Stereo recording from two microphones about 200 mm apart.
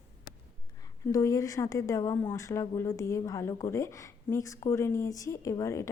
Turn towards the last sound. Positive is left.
turn(degrees=15)  # may be behind; listen again after turning